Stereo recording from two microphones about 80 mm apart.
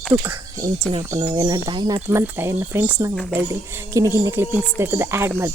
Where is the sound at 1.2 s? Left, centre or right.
Right.